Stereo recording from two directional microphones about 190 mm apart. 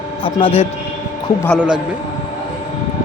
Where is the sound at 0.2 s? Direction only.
30° left (ahead or behind).